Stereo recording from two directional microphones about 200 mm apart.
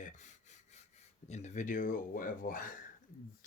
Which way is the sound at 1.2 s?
35° left (ahead or behind).